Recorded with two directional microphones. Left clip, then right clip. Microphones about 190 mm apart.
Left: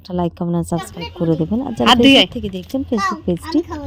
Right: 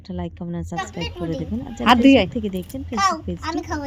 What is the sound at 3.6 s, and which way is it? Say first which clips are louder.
Speech: right 1 dB; 10° right (ahead or behind).